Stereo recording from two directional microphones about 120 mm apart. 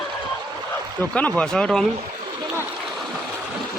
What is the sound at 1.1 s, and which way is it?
Speech, 10° left (ahead or behind).